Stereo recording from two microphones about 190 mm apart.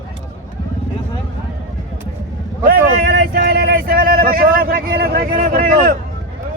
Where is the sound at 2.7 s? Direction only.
50° right (ahead or behind).